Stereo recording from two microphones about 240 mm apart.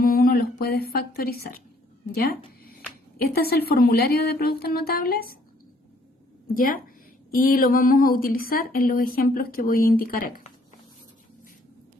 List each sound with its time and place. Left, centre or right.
0.0 s speech: left
3.2 s speech: left
6.5 s speech: left